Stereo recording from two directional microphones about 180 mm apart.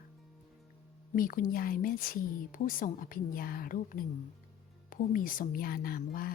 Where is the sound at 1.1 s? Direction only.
50° left (ahead or behind).